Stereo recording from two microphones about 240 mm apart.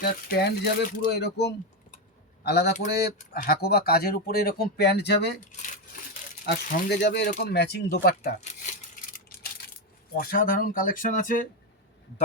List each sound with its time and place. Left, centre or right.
0.0 s speech: left
6.4 s speech: left
9.0 s a sound: left
10.2 s speech: left